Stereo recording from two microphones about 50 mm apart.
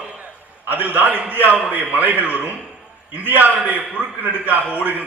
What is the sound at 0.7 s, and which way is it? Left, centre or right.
A man's voice, right.